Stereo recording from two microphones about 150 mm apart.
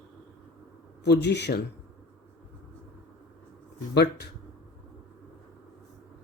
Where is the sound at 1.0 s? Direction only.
90° left.